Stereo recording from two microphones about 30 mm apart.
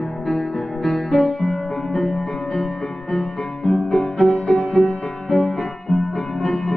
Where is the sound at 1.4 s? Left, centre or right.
Centre.